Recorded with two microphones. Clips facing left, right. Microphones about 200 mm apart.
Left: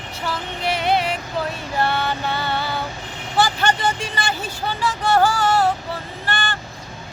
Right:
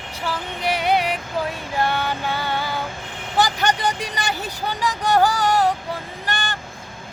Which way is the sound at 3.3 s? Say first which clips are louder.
Left 1 dB; 15° right (ahead or behind).